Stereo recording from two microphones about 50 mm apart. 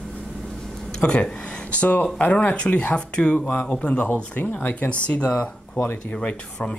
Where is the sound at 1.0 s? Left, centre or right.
Centre.